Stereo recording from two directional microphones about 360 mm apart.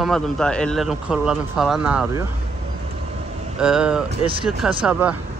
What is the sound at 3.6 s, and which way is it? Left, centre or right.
A man's voice, centre.